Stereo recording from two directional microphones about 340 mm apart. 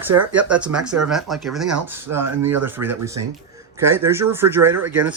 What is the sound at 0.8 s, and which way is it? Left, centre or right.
Speech, right.